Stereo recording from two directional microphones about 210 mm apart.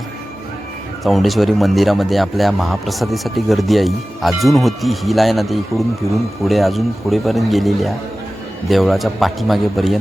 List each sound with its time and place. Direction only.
1.0 s a man's voice: centre (ahead or behind)